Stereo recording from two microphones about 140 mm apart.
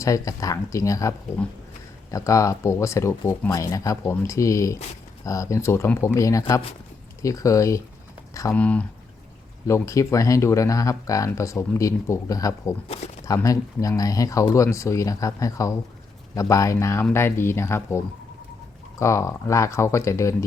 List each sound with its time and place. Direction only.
0.0 s speech: 25° left (ahead or behind)
8.5 s speech: 10° left (ahead or behind)
9.6 s speech: 20° left (ahead or behind)